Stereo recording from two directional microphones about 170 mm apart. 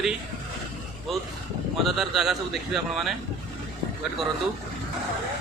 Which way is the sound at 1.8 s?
5° right (ahead or behind).